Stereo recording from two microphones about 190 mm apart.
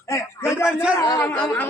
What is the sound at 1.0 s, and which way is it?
Speech, 15° left (ahead or behind).